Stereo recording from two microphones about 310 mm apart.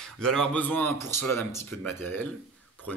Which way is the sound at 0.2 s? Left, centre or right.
Centre.